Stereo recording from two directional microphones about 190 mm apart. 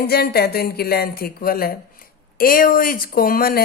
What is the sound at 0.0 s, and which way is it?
A woman's voice, 55° left (ahead or behind).